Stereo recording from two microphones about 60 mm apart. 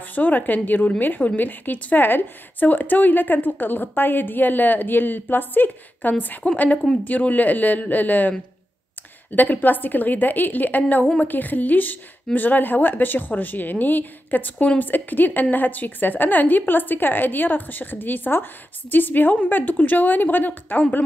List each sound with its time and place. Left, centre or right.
0.0 s a woman's voice: left